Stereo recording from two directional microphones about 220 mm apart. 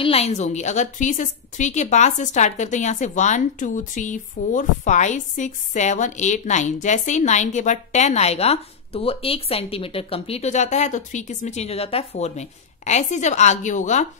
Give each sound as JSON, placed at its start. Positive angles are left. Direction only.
{"t": 0.0, "sound": "a woman's voice", "side_deg": 30}